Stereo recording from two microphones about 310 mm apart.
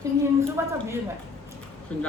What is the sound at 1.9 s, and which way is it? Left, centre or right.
Speech, centre.